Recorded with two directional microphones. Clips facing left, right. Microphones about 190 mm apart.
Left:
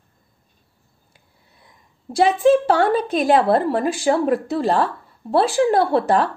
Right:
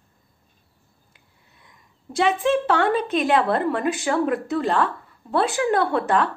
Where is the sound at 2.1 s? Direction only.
40° left (ahead or behind).